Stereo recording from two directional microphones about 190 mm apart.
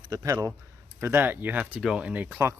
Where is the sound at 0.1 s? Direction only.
20° right (ahead or behind).